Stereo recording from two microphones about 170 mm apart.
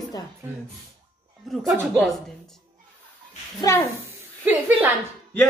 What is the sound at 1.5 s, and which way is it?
Speech, centre (ahead or behind).